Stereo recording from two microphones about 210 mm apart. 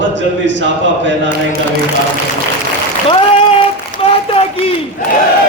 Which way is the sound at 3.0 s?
25° left (ahead or behind).